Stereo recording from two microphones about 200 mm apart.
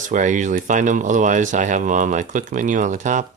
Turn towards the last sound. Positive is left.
turn(degrees=-40)  # may be behind; listen again after turning